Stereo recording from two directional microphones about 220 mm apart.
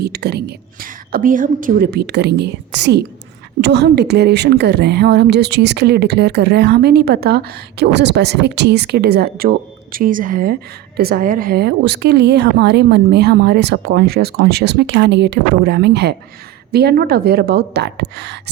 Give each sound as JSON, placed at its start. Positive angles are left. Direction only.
{"t": 0.0, "sound": "a woman's voice", "side_deg": -45}